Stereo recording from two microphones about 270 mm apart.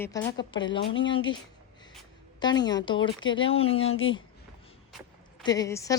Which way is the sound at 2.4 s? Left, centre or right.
Centre.